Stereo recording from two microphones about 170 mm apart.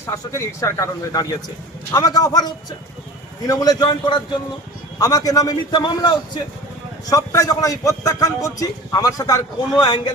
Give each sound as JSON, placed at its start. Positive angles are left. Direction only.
{"t": 0.0, "sound": "a man's voice", "side_deg": 15}